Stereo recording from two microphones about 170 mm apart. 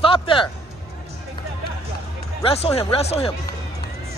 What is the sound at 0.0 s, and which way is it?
Speech, 30° left (ahead or behind).